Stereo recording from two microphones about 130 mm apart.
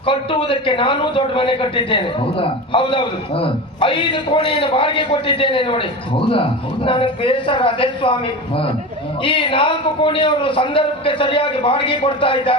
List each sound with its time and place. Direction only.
0.0 s a man's voice: 40° left (ahead or behind)